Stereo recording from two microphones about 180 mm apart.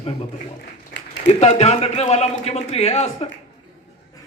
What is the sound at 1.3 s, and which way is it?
A man's voice, 35° left (ahead or behind).